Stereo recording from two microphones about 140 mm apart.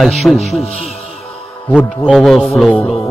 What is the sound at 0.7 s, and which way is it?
Speech, 45° left (ahead or behind).